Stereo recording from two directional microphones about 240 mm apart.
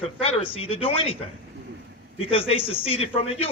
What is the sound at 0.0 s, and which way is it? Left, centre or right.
A man's voice, left.